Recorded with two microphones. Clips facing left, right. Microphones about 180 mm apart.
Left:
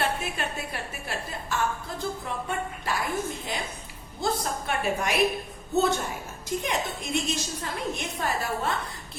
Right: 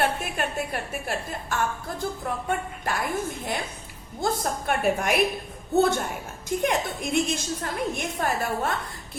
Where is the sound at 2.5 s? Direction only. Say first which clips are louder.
Right 2 dB; 55° right (ahead or behind).